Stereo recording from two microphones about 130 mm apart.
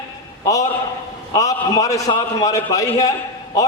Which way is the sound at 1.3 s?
25° left (ahead or behind).